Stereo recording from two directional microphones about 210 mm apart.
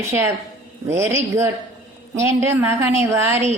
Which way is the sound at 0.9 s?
10° right (ahead or behind).